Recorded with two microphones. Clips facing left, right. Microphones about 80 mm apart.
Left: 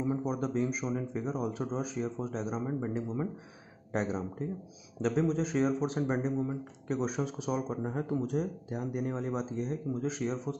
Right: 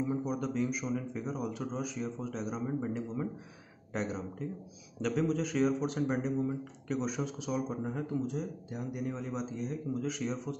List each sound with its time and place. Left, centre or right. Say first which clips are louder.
0.2 s a man's voice: left 2 dB; left
2.6 s a man's voice: left 1 dB; left
3.9 s a man's voice: left 3 dB; left
8.2 s speech: left 3 dB; left
8.6 s a man's voice: left 3 dB; left